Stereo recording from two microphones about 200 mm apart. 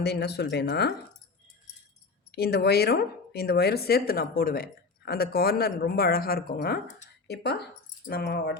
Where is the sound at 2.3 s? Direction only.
55° left (ahead or behind).